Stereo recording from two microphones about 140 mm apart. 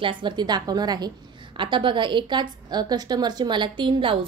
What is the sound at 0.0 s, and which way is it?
A woman's voice, 35° right (ahead or behind).